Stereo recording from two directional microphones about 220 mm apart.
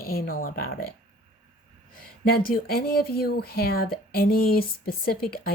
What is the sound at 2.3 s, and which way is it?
Speech, 40° left (ahead or behind).